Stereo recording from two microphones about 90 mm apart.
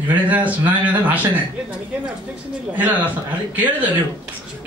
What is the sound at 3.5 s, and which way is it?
Speech, 20° right (ahead or behind).